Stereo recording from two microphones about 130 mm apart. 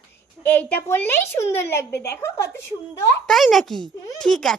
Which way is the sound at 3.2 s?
Centre (ahead or behind).